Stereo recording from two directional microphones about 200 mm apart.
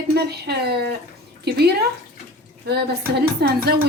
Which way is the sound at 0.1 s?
55° right (ahead or behind).